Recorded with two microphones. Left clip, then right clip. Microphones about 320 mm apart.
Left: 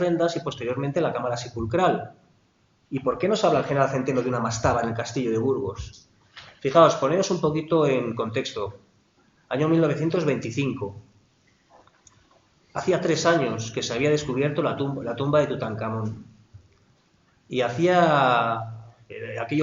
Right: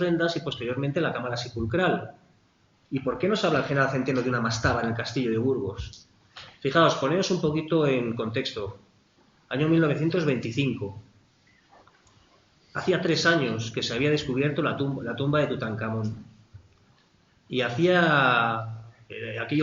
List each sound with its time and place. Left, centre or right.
0.0 s speech: centre
2.9 s speech: centre
12.7 s speech: centre
17.5 s speech: centre